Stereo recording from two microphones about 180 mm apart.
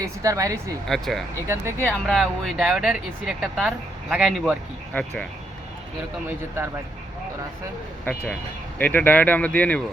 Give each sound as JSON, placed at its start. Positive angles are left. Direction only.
{"t": 0.0, "sound": "a woman's voice", "side_deg": -15}
{"t": 0.9, "sound": "speech", "side_deg": 0}
{"t": 1.5, "sound": "a woman's voice", "side_deg": -15}
{"t": 1.9, "sound": "speech", "side_deg": 5}
{"t": 8.0, "sound": "speech", "side_deg": 10}